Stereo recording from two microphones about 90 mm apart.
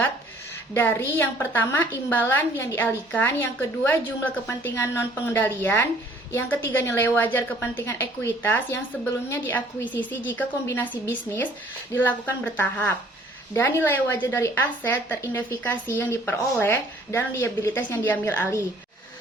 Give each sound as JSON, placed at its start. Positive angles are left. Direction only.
{"t": 0.7, "sound": "a woman's voice", "side_deg": 20}